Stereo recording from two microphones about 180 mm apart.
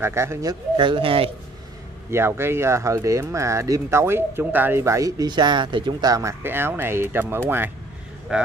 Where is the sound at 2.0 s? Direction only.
15° right (ahead or behind).